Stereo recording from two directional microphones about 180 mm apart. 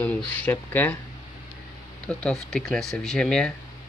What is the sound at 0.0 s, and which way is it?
Speech, 10° left (ahead or behind).